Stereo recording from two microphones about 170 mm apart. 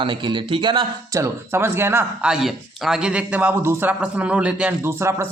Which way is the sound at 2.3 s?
Centre (ahead or behind).